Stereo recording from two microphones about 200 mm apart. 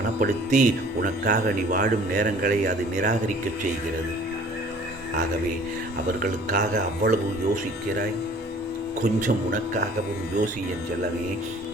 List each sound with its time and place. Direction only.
0.2 s speech: 40° right (ahead or behind)
6.1 s speech: 45° right (ahead or behind)